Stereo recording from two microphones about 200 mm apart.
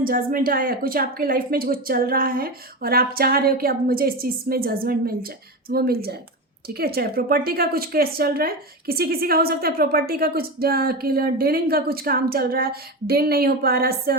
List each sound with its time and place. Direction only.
0.0 s a woman's voice: 45° right (ahead or behind)